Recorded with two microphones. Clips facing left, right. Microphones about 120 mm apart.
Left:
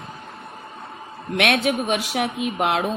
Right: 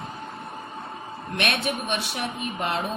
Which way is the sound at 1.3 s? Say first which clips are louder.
Left 7 dB; 90° left.